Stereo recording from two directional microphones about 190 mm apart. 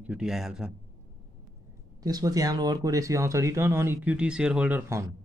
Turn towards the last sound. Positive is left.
turn(degrees=-10)  # may be behind; listen again after turning